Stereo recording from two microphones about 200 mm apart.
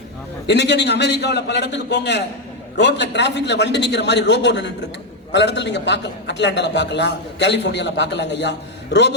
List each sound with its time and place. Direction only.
0.4 s a man's voice: 60° left (ahead or behind)